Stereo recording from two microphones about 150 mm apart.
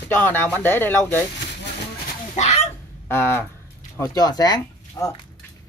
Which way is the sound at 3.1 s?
15° left (ahead or behind).